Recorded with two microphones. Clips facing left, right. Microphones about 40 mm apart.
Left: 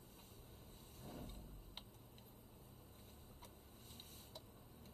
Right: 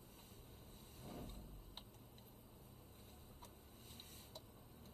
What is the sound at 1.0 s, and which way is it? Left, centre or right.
Vehicle, right.